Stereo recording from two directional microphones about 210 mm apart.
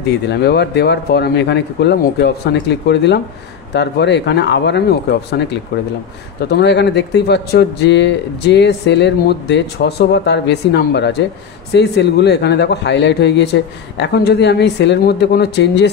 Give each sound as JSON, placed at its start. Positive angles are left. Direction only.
{"t": 0.0, "sound": "speech", "side_deg": 50}